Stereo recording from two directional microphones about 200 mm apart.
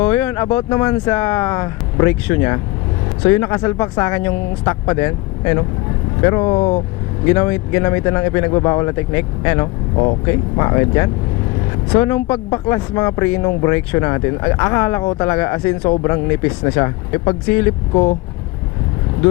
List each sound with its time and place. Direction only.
0.0 s speech: 10° left (ahead or behind)
7.3 s speech: 15° left (ahead or behind)